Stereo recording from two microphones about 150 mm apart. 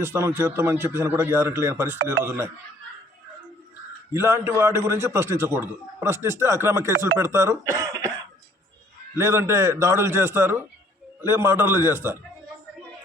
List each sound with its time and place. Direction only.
0.0 s a man's voice: 15° right (ahead or behind)
4.1 s a man's voice: 15° right (ahead or behind)
9.1 s a man's voice: 15° right (ahead or behind)